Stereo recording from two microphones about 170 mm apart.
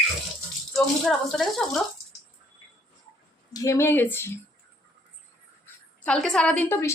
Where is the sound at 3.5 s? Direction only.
20° left (ahead or behind).